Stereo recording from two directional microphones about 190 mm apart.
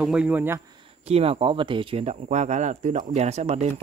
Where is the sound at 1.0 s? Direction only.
30° right (ahead or behind).